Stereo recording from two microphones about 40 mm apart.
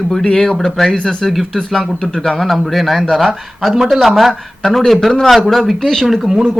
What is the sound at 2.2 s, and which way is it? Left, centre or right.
Speech, centre.